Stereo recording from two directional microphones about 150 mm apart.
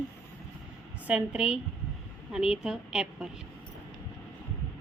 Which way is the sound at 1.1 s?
10° right (ahead or behind).